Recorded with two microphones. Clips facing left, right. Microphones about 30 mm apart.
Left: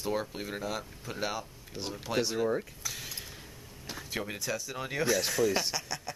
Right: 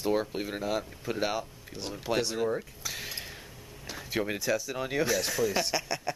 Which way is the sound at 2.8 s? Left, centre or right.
Right.